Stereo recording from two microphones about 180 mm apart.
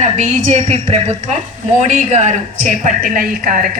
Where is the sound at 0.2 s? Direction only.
40° right (ahead or behind).